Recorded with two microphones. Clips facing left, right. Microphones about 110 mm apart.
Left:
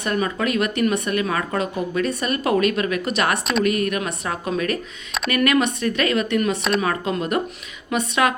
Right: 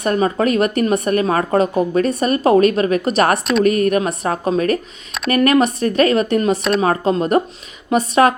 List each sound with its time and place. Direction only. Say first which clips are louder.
0.0 s speech: right 6 dB; 40° right (ahead or behind)